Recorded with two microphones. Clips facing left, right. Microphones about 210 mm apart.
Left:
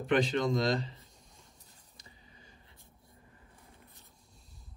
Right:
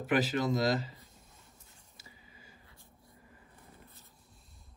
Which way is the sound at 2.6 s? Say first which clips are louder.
Right 1 dB; 20° left (ahead or behind).